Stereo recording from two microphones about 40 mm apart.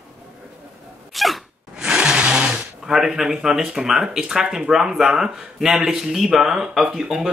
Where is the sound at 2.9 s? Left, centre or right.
Centre.